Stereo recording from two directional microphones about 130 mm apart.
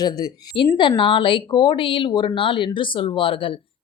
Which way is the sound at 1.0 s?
40° left (ahead or behind).